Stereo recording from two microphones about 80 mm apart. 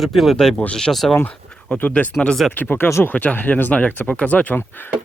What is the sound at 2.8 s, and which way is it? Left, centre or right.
Speech, left.